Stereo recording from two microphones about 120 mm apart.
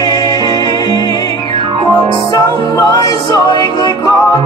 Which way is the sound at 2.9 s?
30° left (ahead or behind).